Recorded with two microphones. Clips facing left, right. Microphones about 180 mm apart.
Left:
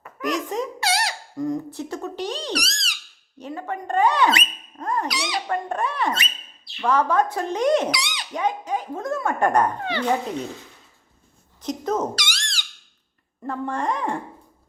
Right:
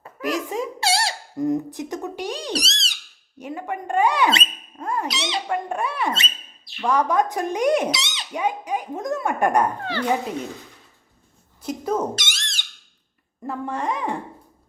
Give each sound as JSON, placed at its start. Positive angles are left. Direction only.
{"t": 0.2, "sound": "a sound", "side_deg": -5}
{"t": 0.8, "sound": "squeak", "side_deg": -30}
{"t": 2.5, "sound": "a sound", "side_deg": -25}
{"t": 3.3, "sound": "speech", "side_deg": -15}
{"t": 4.8, "sound": "cat", "side_deg": -10}
{"t": 5.0, "sound": "cat", "side_deg": -25}
{"t": 5.5, "sound": "speech", "side_deg": -10}
{"t": 7.9, "sound": "speech", "side_deg": -25}
{"t": 8.3, "sound": "speech", "side_deg": -10}
{"t": 9.8, "sound": "speech", "side_deg": 15}
{"t": 11.6, "sound": "speech", "side_deg": -10}
{"t": 12.1, "sound": "squeak", "side_deg": -20}
{"t": 13.4, "sound": "speech", "side_deg": -5}